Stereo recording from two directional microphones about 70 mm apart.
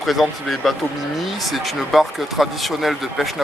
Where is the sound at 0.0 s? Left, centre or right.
Centre.